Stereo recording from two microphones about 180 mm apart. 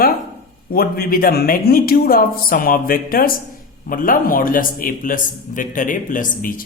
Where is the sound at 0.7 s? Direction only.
55° left (ahead or behind).